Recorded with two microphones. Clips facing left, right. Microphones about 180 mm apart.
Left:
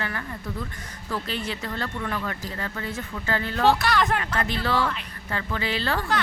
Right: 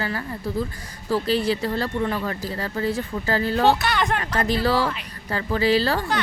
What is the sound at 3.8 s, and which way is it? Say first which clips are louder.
Speech: even; centre (ahead or behind).